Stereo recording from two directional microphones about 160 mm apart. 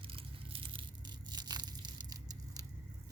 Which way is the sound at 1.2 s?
25° right (ahead or behind).